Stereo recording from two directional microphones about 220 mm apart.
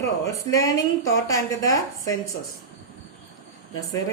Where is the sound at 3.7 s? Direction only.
15° left (ahead or behind).